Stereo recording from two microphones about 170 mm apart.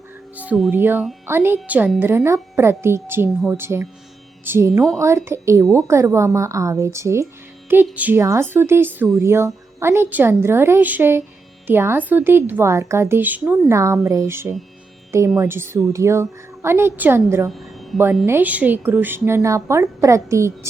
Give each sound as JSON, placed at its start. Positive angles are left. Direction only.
{"t": 0.3, "sound": "a woman's voice", "side_deg": -5}
{"t": 17.5, "sound": "music", "side_deg": 0}
{"t": 18.3, "sound": "a woman's voice", "side_deg": -10}